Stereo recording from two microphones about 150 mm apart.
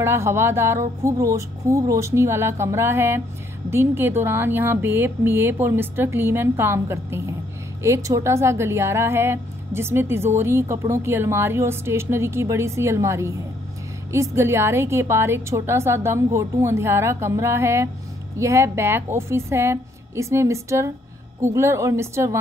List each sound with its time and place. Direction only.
0.0 s a woman's voice: 15° right (ahead or behind)